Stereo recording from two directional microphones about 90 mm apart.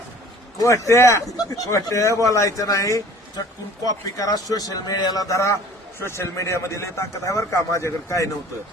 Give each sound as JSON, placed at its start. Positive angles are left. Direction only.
{"t": 0.6, "sound": "a man's voice", "side_deg": 35}